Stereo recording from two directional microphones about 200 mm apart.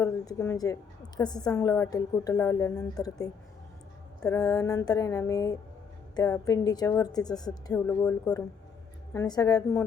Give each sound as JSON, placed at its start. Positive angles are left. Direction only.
{"t": 0.0, "sound": "a woman's voice", "side_deg": 15}